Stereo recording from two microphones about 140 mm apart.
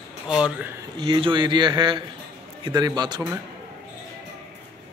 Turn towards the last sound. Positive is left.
turn(degrees=-30)  # may be behind; listen again after turning